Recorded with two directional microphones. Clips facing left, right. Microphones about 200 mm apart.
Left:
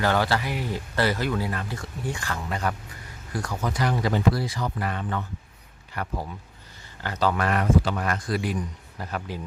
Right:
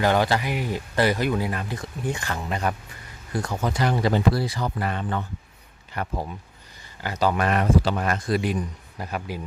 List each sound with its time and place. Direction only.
0.0 s a man's voice: 20° right (ahead or behind)
7.0 s a man's voice: 10° right (ahead or behind)